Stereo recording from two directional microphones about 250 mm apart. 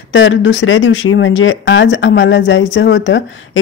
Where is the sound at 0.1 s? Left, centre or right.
Left.